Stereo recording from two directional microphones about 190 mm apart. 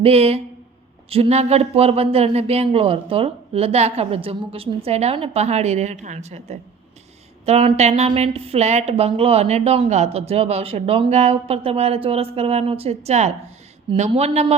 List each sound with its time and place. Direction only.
0.0 s a woman's voice: 30° right (ahead or behind)